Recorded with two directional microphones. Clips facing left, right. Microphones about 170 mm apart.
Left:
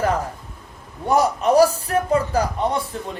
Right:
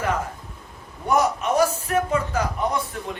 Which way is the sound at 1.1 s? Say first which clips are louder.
Left 4 dB; 35° left (ahead or behind).